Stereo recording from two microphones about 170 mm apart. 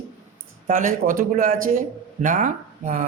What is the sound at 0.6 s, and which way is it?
A man's voice, 50° right (ahead or behind).